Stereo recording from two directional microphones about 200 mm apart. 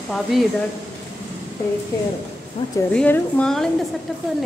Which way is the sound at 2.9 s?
5° left (ahead or behind).